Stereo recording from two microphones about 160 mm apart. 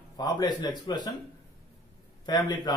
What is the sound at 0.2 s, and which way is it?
Speech, 25° left (ahead or behind).